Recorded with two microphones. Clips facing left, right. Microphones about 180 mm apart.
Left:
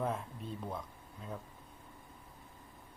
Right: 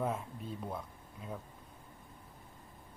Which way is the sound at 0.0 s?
5° right (ahead or behind).